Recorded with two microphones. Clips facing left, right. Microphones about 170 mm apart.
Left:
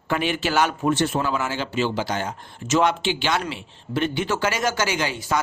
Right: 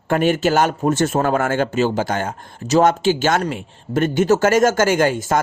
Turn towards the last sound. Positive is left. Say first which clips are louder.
# right 8 dB
turn(degrees=-50)  # may be behind; listen again after turning